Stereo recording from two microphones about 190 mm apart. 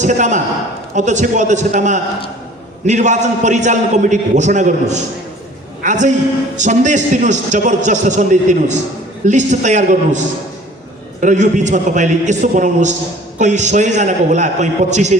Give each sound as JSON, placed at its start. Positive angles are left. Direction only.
{"t": 0.0, "sound": "a man's voice", "side_deg": -40}